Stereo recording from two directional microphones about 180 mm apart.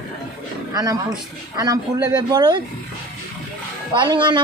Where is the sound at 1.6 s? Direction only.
20° right (ahead or behind).